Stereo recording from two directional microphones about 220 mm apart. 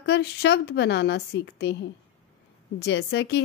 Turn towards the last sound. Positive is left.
turn(degrees=50)  # may be behind; listen again after turning